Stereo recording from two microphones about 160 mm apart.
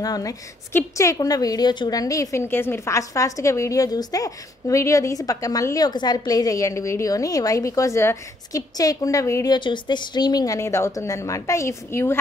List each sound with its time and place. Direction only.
0.0 s a woman's voice: 20° left (ahead or behind)